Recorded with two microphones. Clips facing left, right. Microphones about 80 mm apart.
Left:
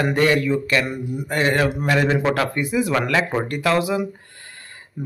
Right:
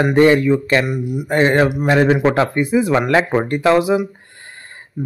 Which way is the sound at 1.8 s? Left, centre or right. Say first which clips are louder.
Right 5 dB; right.